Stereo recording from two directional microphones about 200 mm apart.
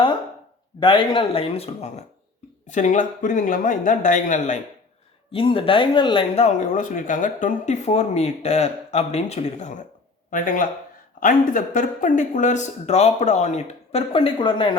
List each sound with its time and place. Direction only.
0.8 s speech: 25° left (ahead or behind); by 4.6 s 40° left (ahead or behind)
5.3 s speech: 25° left (ahead or behind)